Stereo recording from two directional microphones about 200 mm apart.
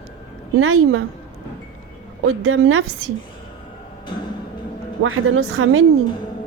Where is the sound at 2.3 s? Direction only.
90° right.